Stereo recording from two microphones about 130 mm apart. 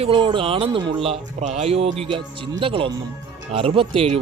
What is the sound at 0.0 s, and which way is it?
Speech, 40° right (ahead or behind).